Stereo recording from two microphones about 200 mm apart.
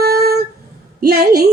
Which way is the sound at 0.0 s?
50° right (ahead or behind).